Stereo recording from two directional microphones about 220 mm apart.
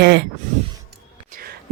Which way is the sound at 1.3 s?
40° right (ahead or behind).